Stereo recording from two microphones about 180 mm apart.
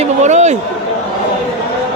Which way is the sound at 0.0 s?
40° right (ahead or behind).